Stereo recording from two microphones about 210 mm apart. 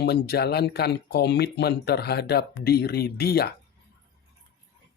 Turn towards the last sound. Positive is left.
turn(degrees=50)  # may be behind; listen again after turning